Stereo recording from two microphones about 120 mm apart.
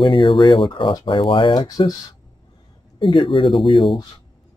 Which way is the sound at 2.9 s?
45° left (ahead or behind).